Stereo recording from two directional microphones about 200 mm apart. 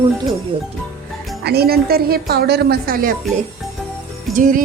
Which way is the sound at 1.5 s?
50° right (ahead or behind).